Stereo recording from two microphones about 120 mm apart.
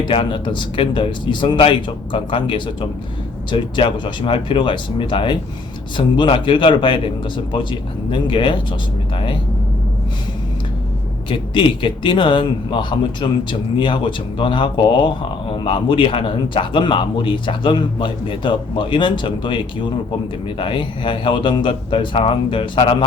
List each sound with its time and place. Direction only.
0.0 s a man's voice: 45° left (ahead or behind)
11.3 s a man's voice: 40° left (ahead or behind)